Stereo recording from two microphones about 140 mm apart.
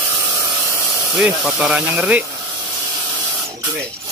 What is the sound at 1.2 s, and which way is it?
Speech, 10° right (ahead or behind).